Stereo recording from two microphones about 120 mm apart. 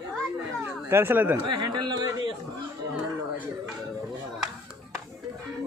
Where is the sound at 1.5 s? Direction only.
35° right (ahead or behind).